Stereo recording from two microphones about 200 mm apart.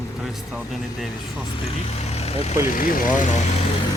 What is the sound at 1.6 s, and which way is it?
Speech, 30° left (ahead or behind).